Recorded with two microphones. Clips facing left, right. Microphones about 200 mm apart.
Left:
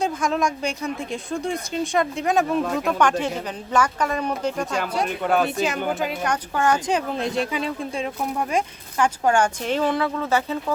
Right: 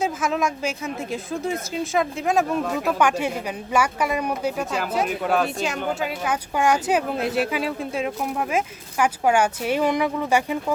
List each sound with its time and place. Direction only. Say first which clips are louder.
0.0 s a woman's voice: left 1 dB; 5° right (ahead or behind)